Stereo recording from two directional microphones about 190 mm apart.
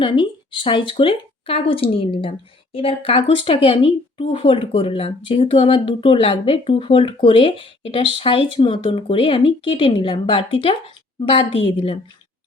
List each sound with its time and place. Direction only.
0.0 s a woman's voice: 25° left (ahead or behind)